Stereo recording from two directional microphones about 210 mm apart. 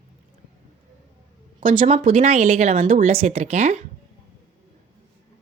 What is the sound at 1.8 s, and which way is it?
Speech, 30° right (ahead or behind).